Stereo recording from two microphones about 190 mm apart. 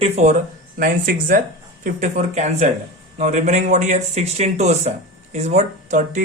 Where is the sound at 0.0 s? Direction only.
40° right (ahead or behind).